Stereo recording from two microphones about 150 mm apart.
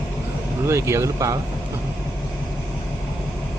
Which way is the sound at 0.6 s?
20° right (ahead or behind).